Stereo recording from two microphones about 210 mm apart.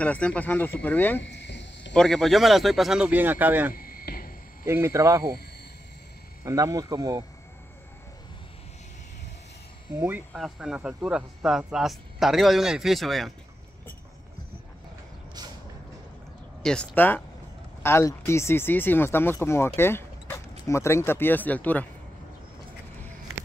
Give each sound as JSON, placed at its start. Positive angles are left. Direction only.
{"t": 0.0, "sound": "speech", "side_deg": 5}
{"t": 1.2, "sound": "a sound", "side_deg": 55}
{"t": 2.0, "sound": "speech", "side_deg": 0}
{"t": 3.7, "sound": "cricket", "side_deg": 45}
{"t": 4.6, "sound": "speech", "side_deg": -10}
{"t": 6.4, "sound": "speech", "side_deg": -15}
{"t": 9.9, "sound": "speech", "side_deg": -10}
{"t": 16.6, "sound": "speech", "side_deg": 5}